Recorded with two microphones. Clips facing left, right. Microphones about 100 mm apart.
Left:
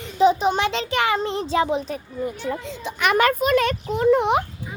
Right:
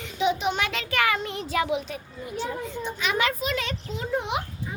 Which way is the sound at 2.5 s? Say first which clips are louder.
Left 2 dB; 90° left.